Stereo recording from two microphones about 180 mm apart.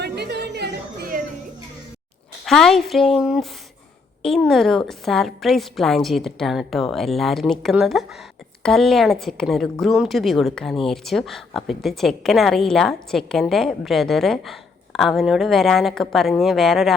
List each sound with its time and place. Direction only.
0.0 s music: 65° right (ahead or behind)
2.4 s a woman's voice: centre (ahead or behind)